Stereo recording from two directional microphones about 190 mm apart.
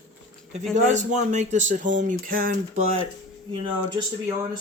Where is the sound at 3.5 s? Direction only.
25° right (ahead or behind).